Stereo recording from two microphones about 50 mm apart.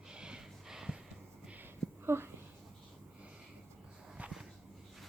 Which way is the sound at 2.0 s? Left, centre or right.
Right.